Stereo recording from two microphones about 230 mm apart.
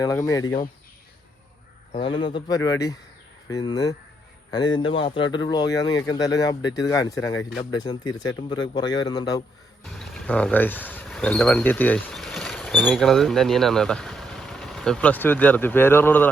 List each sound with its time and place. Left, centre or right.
0.0 s speech: centre
1.9 s speech: left
9.8 s speech: centre